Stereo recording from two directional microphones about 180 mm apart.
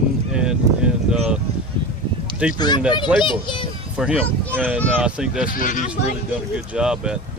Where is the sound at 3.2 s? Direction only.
25° left (ahead or behind).